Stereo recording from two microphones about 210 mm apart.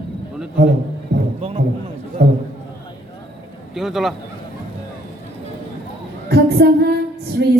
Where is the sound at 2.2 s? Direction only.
50° right (ahead or behind).